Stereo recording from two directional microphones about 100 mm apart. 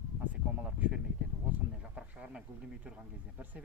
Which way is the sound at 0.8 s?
10° right (ahead or behind).